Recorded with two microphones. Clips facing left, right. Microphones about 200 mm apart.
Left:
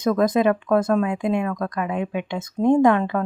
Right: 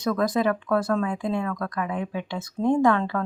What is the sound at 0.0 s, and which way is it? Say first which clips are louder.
Speech: left 5 dB; 20° left (ahead or behind).